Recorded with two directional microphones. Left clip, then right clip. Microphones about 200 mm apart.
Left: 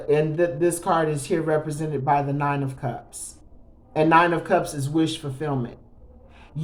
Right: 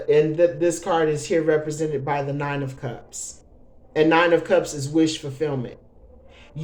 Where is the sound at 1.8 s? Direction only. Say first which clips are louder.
Left 2 dB; 25° right (ahead or behind).